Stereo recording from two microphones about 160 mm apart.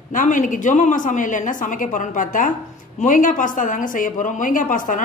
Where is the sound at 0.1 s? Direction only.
55° left (ahead or behind).